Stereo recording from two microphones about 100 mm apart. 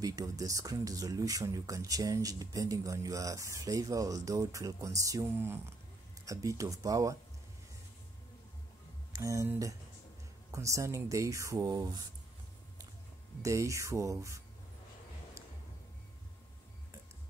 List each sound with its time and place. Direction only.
0.0 s speech: 35° right (ahead or behind)
9.1 s speech: 35° right (ahead or behind)
10.5 s speech: 30° right (ahead or behind)
13.4 s speech: 30° right (ahead or behind)